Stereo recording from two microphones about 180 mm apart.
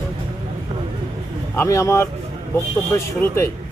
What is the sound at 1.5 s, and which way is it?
A man's voice, 15° left (ahead or behind).